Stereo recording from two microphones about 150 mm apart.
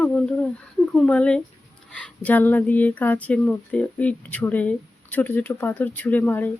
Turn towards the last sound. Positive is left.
turn(degrees=10)  # may be behind; listen again after turning